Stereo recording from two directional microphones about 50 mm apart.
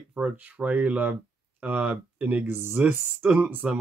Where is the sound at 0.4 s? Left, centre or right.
Right.